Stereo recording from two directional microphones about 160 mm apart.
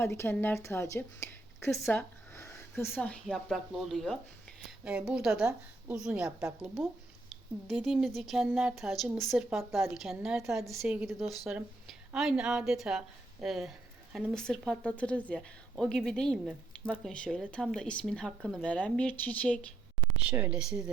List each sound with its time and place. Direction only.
0.0 s speech: 15° left (ahead or behind)
1.7 s speech: centre (ahead or behind)
2.0 s speech: 15° left (ahead or behind)
20.1 s speech: 10° right (ahead or behind)